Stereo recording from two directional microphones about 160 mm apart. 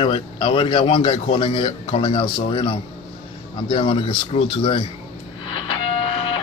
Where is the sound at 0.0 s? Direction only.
30° left (ahead or behind).